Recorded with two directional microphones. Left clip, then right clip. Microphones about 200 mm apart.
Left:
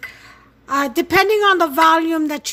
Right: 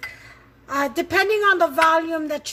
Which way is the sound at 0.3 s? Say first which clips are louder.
Left 7 dB; 55° left (ahead or behind).